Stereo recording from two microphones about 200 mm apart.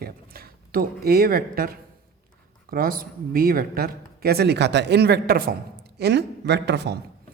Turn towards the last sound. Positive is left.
turn(degrees=-55)  # may be behind; listen again after turning